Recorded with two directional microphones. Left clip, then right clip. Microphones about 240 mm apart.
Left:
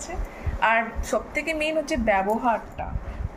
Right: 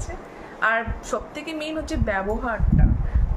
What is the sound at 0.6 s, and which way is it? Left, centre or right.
Speech, centre.